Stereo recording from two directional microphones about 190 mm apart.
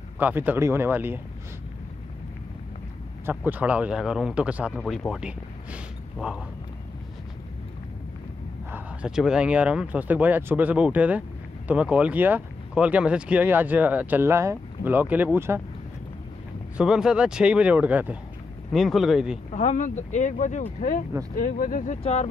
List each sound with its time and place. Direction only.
0.2 s speech: 10° right (ahead or behind)
3.3 s speech: 10° right (ahead or behind)
8.7 s speech: 5° right (ahead or behind)
16.7 s speech: 5° right (ahead or behind)
19.5 s speech: 40° left (ahead or behind)
22.0 s speech: 35° left (ahead or behind)